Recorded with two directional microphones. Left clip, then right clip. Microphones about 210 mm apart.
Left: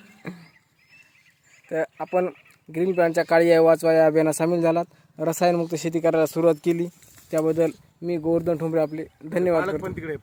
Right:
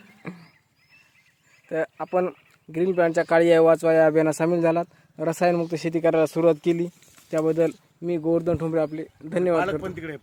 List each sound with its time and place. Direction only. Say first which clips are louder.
0.2 s a sound: left 1 dB; centre (ahead or behind)
1.7 s speech: left 1 dB; centre (ahead or behind)
9.8 s a man's voice: left 2 dB; 45° right (ahead or behind)